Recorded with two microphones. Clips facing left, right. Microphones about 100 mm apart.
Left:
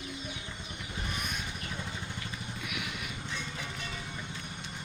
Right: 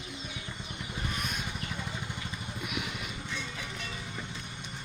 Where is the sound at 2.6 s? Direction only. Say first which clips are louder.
Right 3 dB; 25° right (ahead or behind).